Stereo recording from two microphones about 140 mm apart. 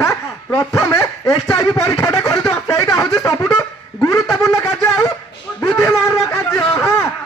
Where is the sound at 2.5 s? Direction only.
20° left (ahead or behind).